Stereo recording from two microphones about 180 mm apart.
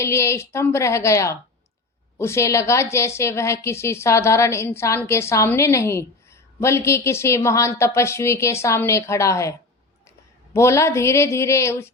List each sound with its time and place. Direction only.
0.0 s a woman's voice: 15° left (ahead or behind)